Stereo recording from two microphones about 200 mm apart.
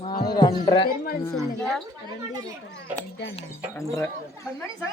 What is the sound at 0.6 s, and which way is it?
Speech, 25° left (ahead or behind).